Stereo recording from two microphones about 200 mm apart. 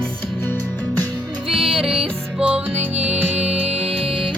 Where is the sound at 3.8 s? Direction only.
Centre (ahead or behind).